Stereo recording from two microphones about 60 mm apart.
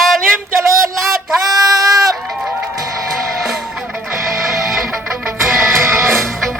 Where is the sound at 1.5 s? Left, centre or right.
Right.